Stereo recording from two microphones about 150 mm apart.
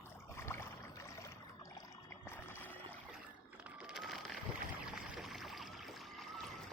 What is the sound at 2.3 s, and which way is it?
Rowboat, 10° left (ahead or behind).